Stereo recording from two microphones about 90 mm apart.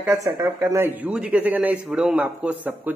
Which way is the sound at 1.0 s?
10° right (ahead or behind).